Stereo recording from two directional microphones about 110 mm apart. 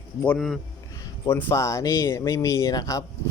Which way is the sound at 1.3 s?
20° left (ahead or behind).